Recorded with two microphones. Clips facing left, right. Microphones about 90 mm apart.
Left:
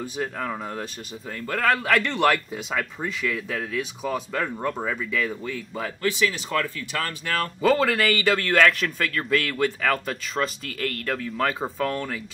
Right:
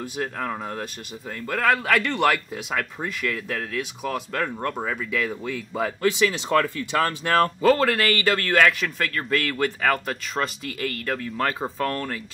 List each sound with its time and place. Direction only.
0.0 s speech: 5° right (ahead or behind)
7.0 s speech: 30° right (ahead or behind)
7.6 s speech: centre (ahead or behind)